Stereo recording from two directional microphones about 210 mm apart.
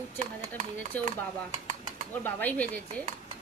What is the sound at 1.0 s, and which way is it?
Speech, 35° right (ahead or behind).